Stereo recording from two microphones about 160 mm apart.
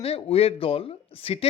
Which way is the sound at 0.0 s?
40° left (ahead or behind).